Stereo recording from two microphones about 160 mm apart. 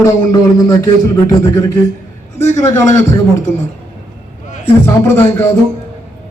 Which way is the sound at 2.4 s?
20° left (ahead or behind).